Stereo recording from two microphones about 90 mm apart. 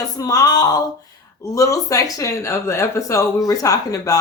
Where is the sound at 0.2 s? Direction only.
45° left (ahead or behind).